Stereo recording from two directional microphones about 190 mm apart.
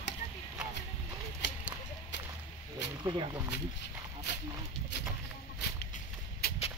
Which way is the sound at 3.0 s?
20° right (ahead or behind).